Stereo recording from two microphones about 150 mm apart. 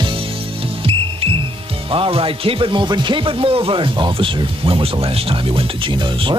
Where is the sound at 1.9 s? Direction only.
35° right (ahead or behind).